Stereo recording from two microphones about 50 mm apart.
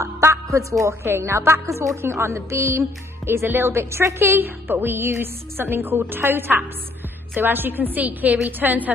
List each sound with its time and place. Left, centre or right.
0.0 s music: right
1.0 s a woman's voice: right
1.3 s a woman's voice: right
3.4 s a woman's voice: right
4.6 s a woman's voice: right